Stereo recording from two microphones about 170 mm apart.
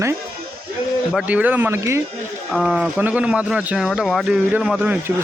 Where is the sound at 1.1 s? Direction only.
10° right (ahead or behind).